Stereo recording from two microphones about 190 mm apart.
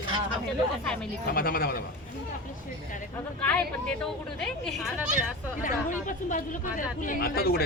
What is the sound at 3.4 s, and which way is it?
Speech, 5° left (ahead or behind).